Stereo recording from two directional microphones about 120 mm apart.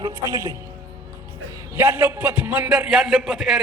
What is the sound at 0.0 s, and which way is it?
Speech, 25° right (ahead or behind).